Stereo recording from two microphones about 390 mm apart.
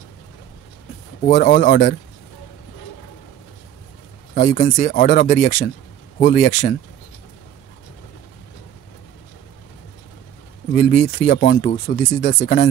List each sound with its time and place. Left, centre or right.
1.2 s speech: left
4.4 s speech: left
10.7 s speech: left